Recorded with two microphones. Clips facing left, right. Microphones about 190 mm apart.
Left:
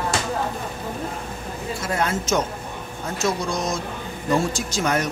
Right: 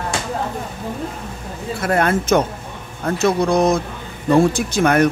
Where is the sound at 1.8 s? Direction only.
60° right (ahead or behind).